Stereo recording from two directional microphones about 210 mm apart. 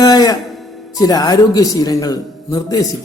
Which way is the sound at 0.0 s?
20° left (ahead or behind).